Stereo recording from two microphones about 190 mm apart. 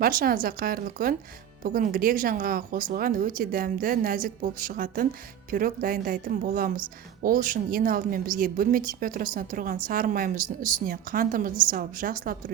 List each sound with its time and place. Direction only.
0.0 s a woman's voice: 50° right (ahead or behind)